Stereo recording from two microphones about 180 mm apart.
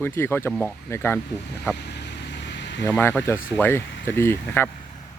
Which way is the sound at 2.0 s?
75° left (ahead or behind).